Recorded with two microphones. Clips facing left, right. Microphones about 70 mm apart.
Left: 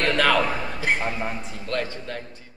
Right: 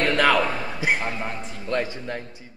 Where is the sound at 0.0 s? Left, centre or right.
Centre.